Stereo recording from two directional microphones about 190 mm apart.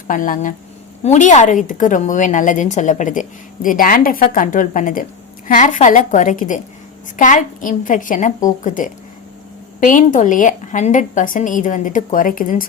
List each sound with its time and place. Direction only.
0.1 s a woman's voice: 45° left (ahead or behind)